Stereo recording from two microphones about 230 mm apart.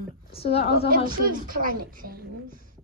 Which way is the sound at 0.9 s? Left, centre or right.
Right.